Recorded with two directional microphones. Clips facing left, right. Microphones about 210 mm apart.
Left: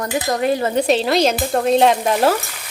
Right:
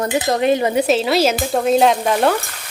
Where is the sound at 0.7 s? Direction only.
5° right (ahead or behind).